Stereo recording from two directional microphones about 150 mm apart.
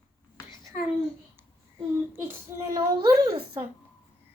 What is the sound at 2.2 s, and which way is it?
Speech, 20° right (ahead or behind).